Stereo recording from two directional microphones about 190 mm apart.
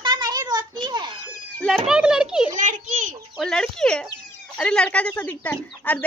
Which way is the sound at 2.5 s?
40° right (ahead or behind).